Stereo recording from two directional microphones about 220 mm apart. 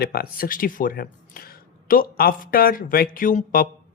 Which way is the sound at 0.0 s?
45° left (ahead or behind).